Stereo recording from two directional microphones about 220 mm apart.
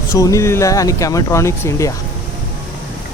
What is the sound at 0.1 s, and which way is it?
Speech, 15° left (ahead or behind).